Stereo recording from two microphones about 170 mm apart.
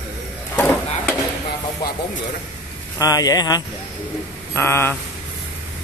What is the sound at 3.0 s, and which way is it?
A man's voice, 20° left (ahead or behind).